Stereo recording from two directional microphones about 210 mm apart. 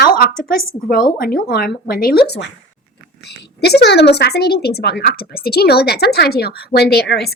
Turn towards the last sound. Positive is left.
turn(degrees=50)  # may be behind; listen again after turning